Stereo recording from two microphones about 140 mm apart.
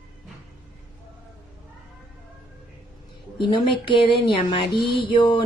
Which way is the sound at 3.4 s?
35° left (ahead or behind).